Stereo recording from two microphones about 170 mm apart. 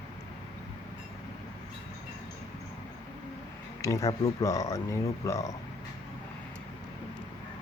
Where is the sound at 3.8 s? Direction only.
20° left (ahead or behind).